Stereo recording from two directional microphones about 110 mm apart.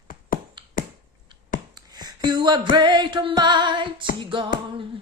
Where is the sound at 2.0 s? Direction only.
40° right (ahead or behind).